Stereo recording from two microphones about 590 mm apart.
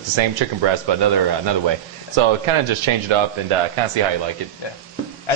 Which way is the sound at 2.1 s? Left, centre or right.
Right.